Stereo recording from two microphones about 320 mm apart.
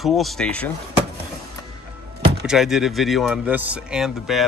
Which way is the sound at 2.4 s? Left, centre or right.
Centre.